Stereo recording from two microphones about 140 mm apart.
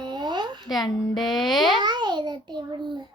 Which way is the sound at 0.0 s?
30° right (ahead or behind).